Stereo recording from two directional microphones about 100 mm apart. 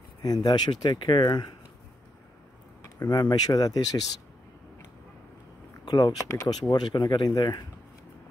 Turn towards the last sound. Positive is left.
turn(degrees=45)  # may be behind; listen again after turning